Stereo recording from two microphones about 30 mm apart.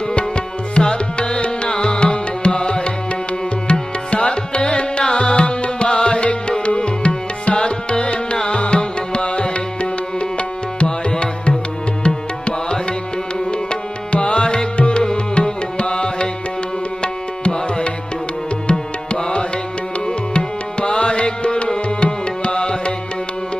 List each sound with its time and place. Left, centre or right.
0.1 s tabla: left
7.4 s music: left
13.5 s music: left
17.0 s tabla: left
18.7 s music: left
21.8 s tabla: left